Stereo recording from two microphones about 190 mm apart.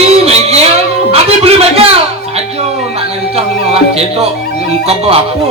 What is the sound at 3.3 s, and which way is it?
Music, 30° right (ahead or behind).